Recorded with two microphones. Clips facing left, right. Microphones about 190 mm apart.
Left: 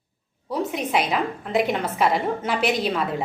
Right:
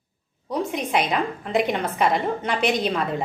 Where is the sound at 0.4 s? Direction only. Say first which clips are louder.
Even; centre (ahead or behind).